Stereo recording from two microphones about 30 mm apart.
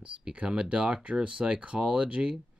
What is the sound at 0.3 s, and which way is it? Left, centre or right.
Speech, right.